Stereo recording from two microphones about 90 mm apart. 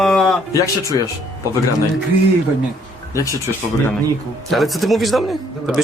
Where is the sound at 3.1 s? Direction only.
35° left (ahead or behind).